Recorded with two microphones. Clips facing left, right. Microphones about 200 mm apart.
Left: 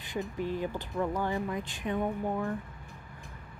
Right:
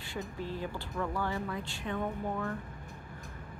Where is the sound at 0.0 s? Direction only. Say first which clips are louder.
Left 5 dB; 15° left (ahead or behind).